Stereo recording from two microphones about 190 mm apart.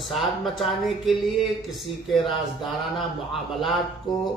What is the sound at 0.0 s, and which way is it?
Speech, centre (ahead or behind).